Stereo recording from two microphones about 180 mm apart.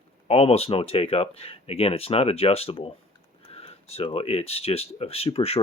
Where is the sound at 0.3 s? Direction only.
35° left (ahead or behind).